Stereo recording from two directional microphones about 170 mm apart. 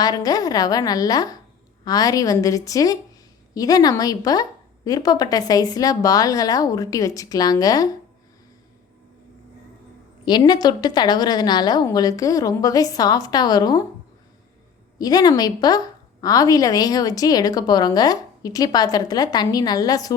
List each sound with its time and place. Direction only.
0.0 s a woman's voice: 20° left (ahead or behind)
10.2 s a woman's voice: 25° left (ahead or behind)
14.9 s a woman's voice: 20° left (ahead or behind)